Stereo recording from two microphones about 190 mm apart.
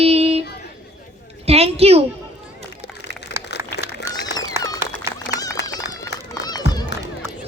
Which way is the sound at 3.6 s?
15° right (ahead or behind).